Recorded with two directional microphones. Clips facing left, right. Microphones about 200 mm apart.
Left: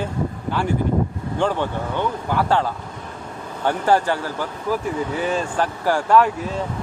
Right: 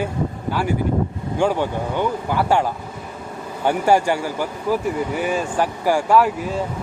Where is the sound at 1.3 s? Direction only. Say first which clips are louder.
Right 2 dB; 10° right (ahead or behind).